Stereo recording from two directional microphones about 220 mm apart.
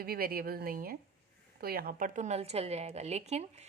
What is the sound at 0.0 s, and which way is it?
A woman's voice, 45° right (ahead or behind).